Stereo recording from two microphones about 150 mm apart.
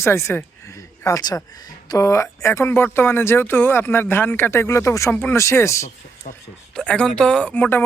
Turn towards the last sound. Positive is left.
turn(degrees=15)  # may be behind; listen again after turning